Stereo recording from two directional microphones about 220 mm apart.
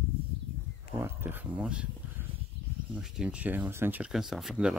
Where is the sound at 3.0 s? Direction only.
Centre (ahead or behind).